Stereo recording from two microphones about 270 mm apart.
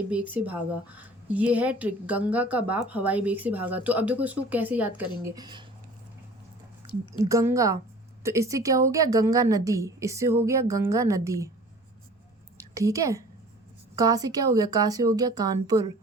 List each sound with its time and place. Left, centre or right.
0.3 s a woman's voice: centre
6.8 s a woman's voice: centre
7.3 s a woman's voice: centre
12.5 s a woman's voice: centre